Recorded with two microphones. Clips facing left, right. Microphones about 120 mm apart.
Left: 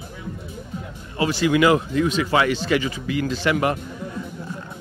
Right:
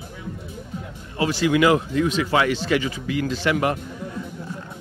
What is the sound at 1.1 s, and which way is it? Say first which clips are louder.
A man's voice: left 1 dB; 20° left (ahead or behind).